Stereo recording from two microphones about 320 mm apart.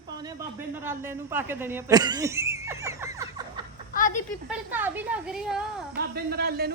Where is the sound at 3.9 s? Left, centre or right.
Left.